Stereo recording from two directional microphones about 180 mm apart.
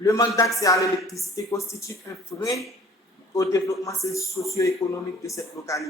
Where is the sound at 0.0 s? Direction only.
20° left (ahead or behind).